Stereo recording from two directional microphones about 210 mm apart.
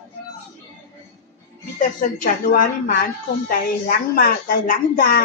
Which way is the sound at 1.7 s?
40° left (ahead or behind).